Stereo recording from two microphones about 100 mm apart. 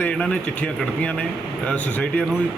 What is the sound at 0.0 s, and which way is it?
Speech, 10° left (ahead or behind).